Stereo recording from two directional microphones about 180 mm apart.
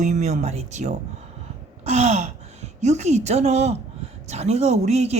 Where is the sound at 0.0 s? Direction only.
40° right (ahead or behind).